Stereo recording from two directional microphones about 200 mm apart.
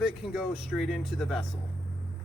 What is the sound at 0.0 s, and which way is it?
Speech, 5° right (ahead or behind).